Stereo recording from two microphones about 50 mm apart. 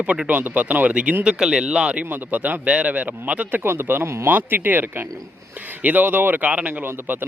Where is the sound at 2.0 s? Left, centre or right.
Right.